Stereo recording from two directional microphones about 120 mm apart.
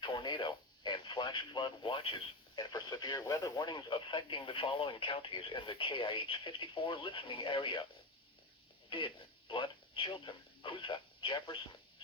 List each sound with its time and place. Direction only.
0.0 s speech: 40° left (ahead or behind)
8.9 s speech: 45° left (ahead or behind)